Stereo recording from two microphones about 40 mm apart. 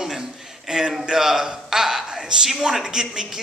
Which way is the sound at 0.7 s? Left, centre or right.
Centre.